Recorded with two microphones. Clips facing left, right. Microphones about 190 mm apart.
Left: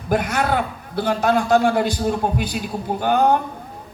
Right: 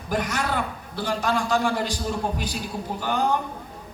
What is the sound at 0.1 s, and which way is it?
A man's voice, 55° left (ahead or behind).